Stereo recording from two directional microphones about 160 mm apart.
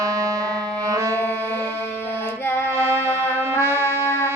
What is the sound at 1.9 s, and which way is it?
Child singing, 15° left (ahead or behind).